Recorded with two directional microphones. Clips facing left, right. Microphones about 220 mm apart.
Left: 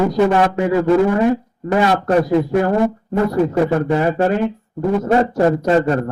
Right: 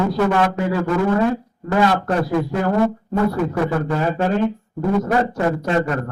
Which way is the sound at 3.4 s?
30° left (ahead or behind).